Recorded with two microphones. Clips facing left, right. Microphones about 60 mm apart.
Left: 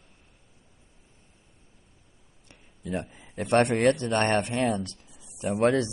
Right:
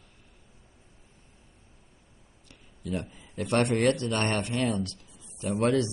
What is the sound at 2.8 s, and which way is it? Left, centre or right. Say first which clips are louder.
Speech: left 1 dB; left.